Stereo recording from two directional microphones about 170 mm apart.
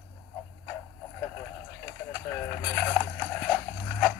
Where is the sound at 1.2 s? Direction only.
10° left (ahead or behind).